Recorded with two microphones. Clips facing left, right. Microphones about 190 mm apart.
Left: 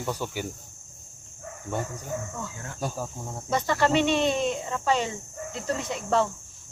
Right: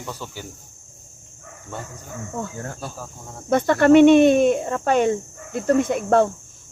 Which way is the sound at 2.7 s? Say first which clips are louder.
Left 3 dB; 15° left (ahead or behind).